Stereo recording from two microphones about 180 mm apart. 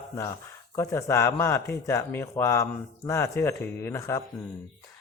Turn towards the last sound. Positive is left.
turn(degrees=15)  # may be behind; listen again after turning